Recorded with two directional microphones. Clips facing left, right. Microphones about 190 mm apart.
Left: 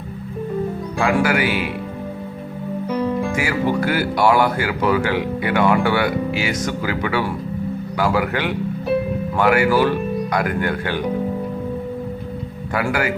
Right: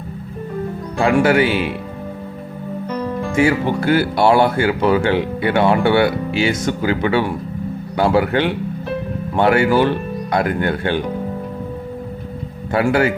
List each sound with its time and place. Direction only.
1.0 s speech: 25° right (ahead or behind)
2.8 s music: 10° left (ahead or behind)
3.3 s speech: 25° right (ahead or behind)
12.7 s speech: 25° right (ahead or behind)